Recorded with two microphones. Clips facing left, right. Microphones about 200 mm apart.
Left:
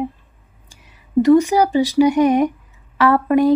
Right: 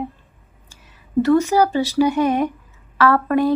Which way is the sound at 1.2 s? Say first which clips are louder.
Left 3 dB; 15° left (ahead or behind).